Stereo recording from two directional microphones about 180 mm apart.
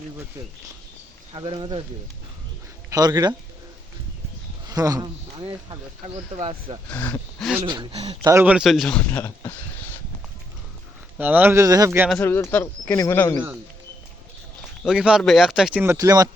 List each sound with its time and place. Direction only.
1.3 s speech: 25° right (ahead or behind)
2.9 s speech: 20° right (ahead or behind)
4.7 s speech: 20° right (ahead or behind)
6.9 s speech: 10° left (ahead or behind)
7.6 s speech: 30° right (ahead or behind)
8.5 s speech: centre (ahead or behind)
11.2 s speech: 10° right (ahead or behind)
12.1 s speech: 10° left (ahead or behind)
14.8 s speech: 5° right (ahead or behind)